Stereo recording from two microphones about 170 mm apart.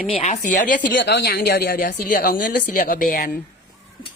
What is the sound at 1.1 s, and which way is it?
Speech, 75° left (ahead or behind).